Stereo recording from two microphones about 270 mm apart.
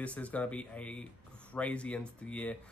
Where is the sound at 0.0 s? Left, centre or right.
Centre.